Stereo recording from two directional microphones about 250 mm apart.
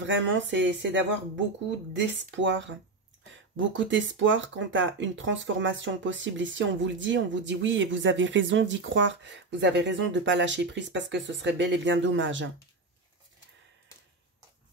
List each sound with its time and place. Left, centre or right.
0.0 s speech: right